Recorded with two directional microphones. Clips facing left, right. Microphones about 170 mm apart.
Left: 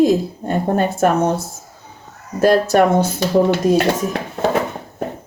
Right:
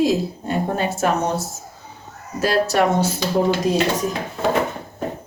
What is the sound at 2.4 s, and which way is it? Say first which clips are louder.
Speech: left 5 dB; 50° left (ahead or behind).